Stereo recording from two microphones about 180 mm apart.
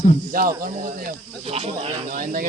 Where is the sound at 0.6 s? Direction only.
50° right (ahead or behind).